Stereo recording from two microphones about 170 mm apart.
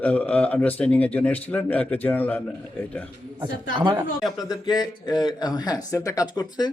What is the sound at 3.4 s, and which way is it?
Speech, 25° right (ahead or behind).